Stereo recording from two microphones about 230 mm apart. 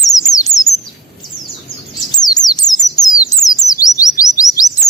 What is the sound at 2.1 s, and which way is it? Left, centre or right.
Bird, centre.